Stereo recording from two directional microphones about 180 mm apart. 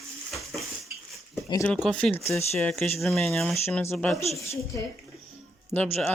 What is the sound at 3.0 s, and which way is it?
Speech, centre (ahead or behind).